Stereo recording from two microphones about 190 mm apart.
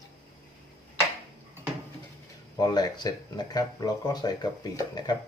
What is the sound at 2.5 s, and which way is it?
Speech, 20° left (ahead or behind).